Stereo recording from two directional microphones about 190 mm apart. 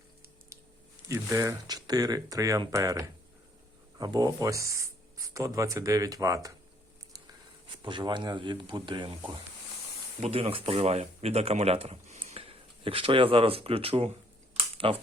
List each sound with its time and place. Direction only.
0.5 s a sound: 15° right (ahead or behind)
1.0 s speech: 15° right (ahead or behind)
7.7 s speech: 25° right (ahead or behind)
10.2 s speech: 35° right (ahead or behind)